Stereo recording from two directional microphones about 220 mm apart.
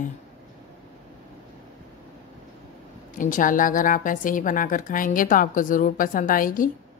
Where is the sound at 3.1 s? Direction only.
35° left (ahead or behind).